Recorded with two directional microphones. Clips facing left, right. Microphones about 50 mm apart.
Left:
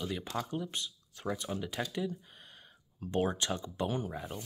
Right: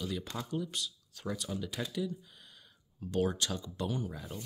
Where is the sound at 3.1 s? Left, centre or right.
Left.